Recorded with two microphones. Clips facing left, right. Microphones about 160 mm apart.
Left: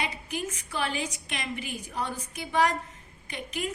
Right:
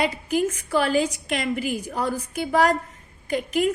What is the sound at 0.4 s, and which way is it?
A woman's voice, 70° right (ahead or behind).